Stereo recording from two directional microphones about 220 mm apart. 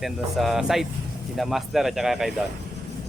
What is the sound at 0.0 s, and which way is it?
Speech, centre (ahead or behind).